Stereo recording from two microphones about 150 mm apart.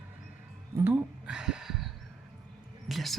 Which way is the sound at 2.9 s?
Centre (ahead or behind).